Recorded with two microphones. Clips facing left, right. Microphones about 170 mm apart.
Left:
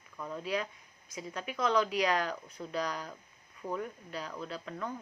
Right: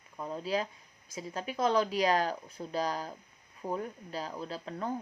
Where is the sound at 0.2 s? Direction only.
30° right (ahead or behind).